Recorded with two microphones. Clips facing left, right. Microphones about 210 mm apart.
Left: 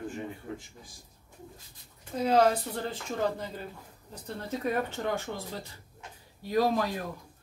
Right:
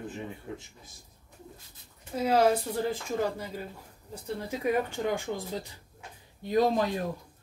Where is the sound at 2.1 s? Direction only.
10° right (ahead or behind).